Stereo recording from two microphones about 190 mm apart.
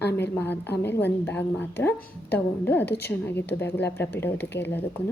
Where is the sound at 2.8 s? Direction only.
60° left (ahead or behind).